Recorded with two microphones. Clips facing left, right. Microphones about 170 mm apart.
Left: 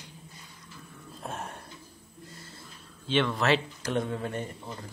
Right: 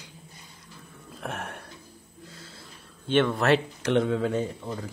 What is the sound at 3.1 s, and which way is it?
Speech, 55° right (ahead or behind).